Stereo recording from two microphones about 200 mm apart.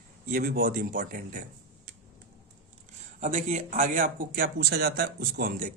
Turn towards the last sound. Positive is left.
turn(degrees=-50)  # may be behind; listen again after turning